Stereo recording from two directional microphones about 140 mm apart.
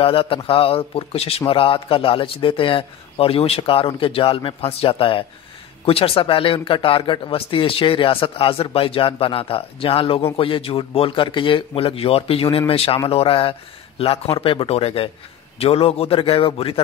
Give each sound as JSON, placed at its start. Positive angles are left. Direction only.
{"t": 0.0, "sound": "a man's voice", "side_deg": 40}